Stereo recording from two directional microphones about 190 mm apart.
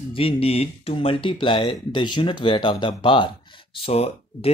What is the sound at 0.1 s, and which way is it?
Speech, 30° left (ahead or behind).